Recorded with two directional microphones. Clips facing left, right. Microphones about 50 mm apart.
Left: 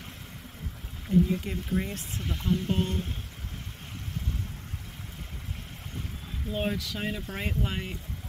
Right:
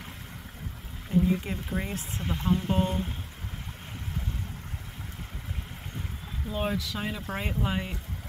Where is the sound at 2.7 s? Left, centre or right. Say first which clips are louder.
Right 2 dB; centre.